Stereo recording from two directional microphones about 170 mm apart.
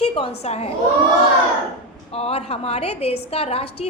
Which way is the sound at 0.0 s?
35° left (ahead or behind).